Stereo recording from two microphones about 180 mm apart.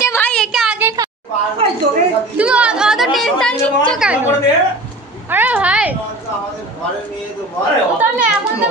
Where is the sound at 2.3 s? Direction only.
5° right (ahead or behind).